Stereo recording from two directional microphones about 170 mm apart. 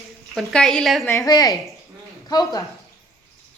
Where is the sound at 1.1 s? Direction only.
20° left (ahead or behind).